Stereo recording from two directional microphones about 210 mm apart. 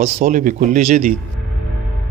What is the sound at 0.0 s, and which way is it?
Speech, 40° right (ahead or behind).